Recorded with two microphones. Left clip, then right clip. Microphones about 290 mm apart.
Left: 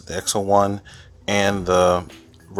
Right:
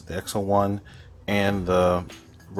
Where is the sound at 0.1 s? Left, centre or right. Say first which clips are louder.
Left 5 dB; left.